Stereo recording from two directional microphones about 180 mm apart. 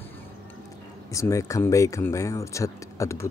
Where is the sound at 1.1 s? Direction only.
15° left (ahead or behind).